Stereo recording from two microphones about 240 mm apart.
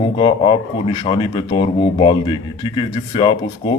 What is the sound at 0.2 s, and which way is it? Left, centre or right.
Speech, left.